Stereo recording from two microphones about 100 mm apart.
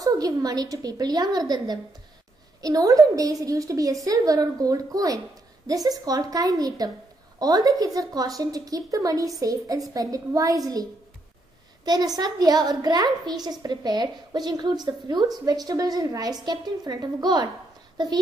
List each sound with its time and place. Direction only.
0.0 s a woman's voice: 40° right (ahead or behind)